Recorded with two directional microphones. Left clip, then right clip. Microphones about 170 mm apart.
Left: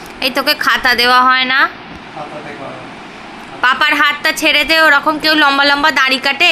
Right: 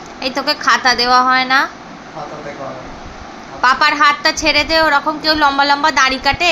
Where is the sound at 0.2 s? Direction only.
10° left (ahead or behind).